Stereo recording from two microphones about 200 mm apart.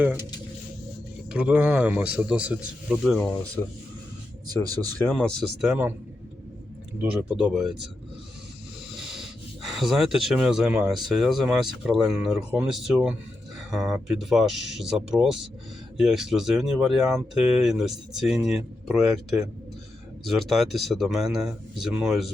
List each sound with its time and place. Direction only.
0.0 s speech: 10° right (ahead or behind)
1.3 s speech: 5° right (ahead or behind)
4.4 s speech: 20° right (ahead or behind)
5.0 s speech: 5° left (ahead or behind)
7.0 s speech: 5° right (ahead or behind)
8.9 s a sound: centre (ahead or behind)
11.1 s speech: centre (ahead or behind)